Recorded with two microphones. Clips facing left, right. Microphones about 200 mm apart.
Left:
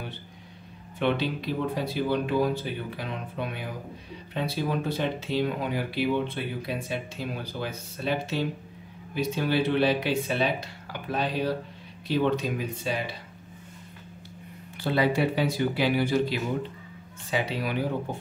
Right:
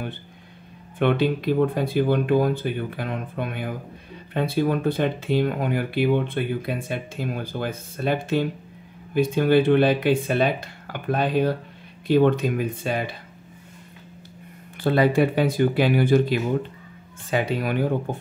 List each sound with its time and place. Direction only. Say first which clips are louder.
0.9 s speech: right 6 dB; 55° right (ahead or behind)
14.8 s speech: right 5 dB; 50° right (ahead or behind)